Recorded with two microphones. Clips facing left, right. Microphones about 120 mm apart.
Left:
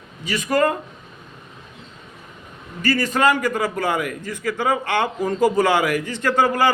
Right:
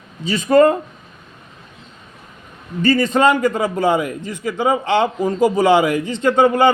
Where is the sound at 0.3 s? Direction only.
30° right (ahead or behind).